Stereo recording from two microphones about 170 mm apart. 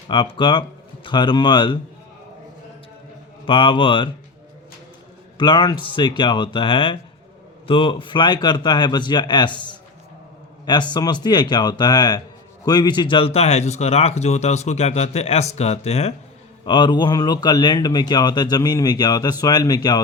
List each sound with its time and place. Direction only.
0.1 s speech: 30° left (ahead or behind)
3.4 s speech: 30° left (ahead or behind)
5.4 s speech: 25° left (ahead or behind)
16.6 s speech: 30° left (ahead or behind)